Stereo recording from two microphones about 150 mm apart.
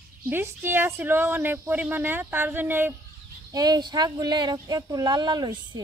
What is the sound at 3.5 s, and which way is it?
Speech, 25° right (ahead or behind).